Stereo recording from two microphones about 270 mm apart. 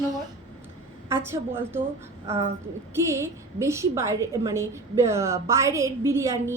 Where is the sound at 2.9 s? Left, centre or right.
Centre.